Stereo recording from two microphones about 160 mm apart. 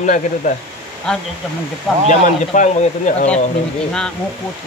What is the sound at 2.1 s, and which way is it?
Speech, 50° left (ahead or behind).